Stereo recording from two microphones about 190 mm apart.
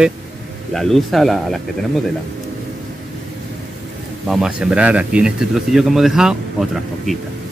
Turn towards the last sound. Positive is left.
turn(degrees=0)  # may be behind; listen again after turning